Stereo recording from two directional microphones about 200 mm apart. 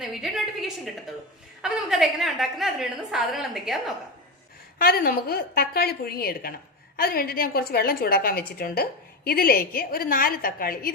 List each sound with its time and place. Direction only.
0.0 s a woman's voice: centre (ahead or behind)
4.8 s a woman's voice: 50° left (ahead or behind)